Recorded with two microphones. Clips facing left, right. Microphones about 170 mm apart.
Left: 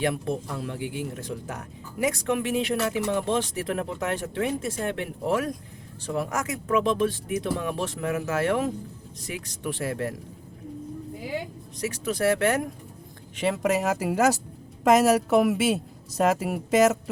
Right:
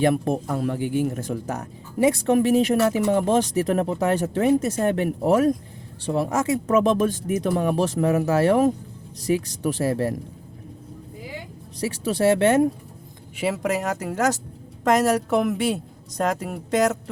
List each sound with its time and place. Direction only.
0.0 s speech: 50° right (ahead or behind)
2.0 s speech: 30° right (ahead or behind)
6.1 s speech: 30° right (ahead or behind)
6.7 s speech: 40° right (ahead or behind)
11.8 s speech: 35° right (ahead or behind)
13.3 s a woman's voice: 5° right (ahead or behind)